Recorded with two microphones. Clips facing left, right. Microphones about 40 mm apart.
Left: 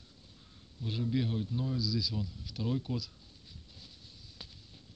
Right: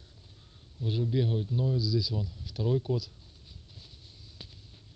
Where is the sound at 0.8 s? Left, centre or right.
Centre.